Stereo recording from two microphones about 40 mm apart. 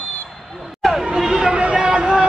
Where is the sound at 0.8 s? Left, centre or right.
Centre.